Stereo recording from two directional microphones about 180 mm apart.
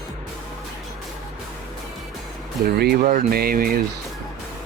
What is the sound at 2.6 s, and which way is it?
Speech, 60° right (ahead or behind).